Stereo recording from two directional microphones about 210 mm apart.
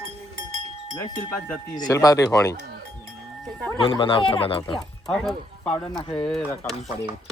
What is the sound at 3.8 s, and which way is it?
Speech, 25° left (ahead or behind).